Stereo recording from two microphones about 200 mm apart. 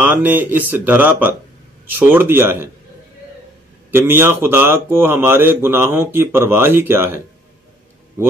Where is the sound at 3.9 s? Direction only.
10° right (ahead or behind).